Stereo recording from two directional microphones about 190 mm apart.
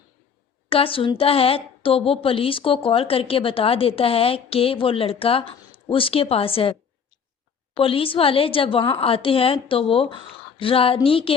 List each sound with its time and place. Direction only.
0.7 s a woman's voice: 30° left (ahead or behind)